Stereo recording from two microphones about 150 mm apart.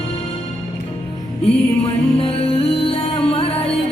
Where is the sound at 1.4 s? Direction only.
40° left (ahead or behind).